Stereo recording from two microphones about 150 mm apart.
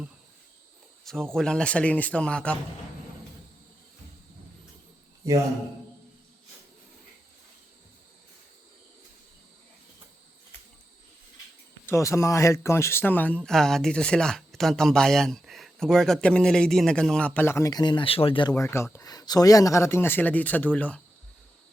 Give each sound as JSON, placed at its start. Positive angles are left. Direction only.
{"t": 1.0, "sound": "speech", "side_deg": 5}
{"t": 5.2, "sound": "a man's voice", "side_deg": -20}
{"t": 11.9, "sound": "speech", "side_deg": 20}
{"t": 18.5, "sound": "speech", "side_deg": 20}